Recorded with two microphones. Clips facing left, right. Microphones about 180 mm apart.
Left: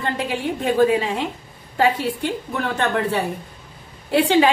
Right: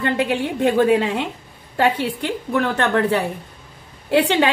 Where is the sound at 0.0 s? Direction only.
70° right (ahead or behind).